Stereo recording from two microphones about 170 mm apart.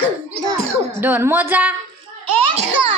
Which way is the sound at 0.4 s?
20° right (ahead or behind).